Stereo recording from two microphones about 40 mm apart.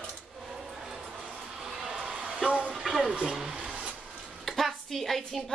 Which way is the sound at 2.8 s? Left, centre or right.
Centre.